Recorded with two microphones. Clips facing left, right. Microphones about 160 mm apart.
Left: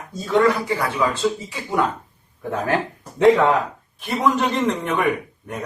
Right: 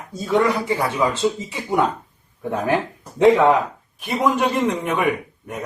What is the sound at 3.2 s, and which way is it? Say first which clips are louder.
A man's voice: right 1 dB; 15° right (ahead or behind).